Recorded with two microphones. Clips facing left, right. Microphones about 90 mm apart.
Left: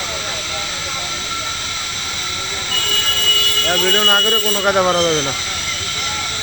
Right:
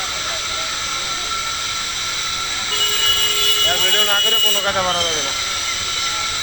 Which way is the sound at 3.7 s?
20° left (ahead or behind).